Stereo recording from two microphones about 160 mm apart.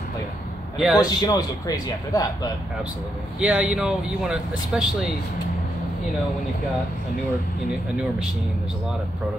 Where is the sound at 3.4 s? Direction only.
5° right (ahead or behind).